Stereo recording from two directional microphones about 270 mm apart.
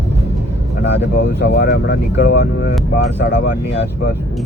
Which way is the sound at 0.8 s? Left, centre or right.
Left.